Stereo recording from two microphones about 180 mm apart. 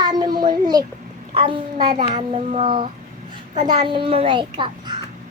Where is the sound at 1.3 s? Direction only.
30° right (ahead or behind).